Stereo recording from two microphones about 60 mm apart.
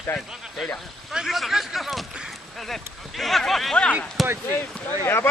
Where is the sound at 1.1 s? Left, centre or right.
Centre.